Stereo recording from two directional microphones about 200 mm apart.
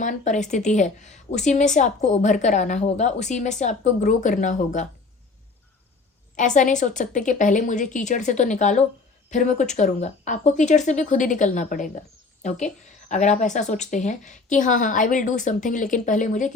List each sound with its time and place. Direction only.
0.0 s a woman's voice: 40° left (ahead or behind)
6.3 s a woman's voice: 40° left (ahead or behind)